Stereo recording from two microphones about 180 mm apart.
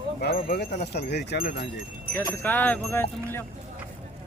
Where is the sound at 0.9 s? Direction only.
70° left (ahead or behind).